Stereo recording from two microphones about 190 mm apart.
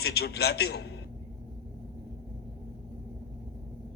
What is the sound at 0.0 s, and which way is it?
Speech, 55° left (ahead or behind).